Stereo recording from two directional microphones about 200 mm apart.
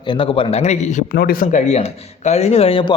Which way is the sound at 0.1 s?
25° left (ahead or behind).